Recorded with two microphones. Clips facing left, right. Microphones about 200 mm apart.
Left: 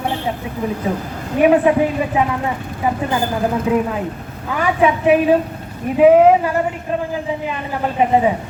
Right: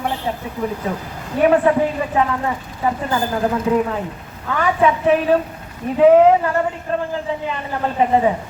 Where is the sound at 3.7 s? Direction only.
20° left (ahead or behind).